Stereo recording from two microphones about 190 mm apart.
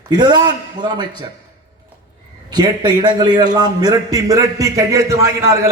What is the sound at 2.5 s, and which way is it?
A man's voice, 20° right (ahead or behind).